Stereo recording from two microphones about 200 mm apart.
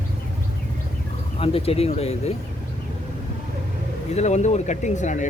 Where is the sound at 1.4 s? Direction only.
30° left (ahead or behind).